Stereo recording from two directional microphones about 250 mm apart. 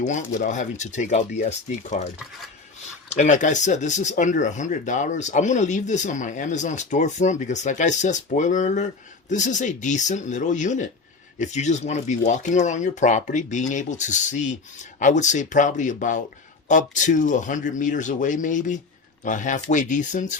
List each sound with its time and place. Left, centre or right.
0.0 s speech: left
3.2 s a man's voice: left